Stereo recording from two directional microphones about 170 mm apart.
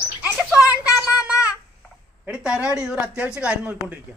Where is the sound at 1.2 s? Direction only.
5° right (ahead or behind).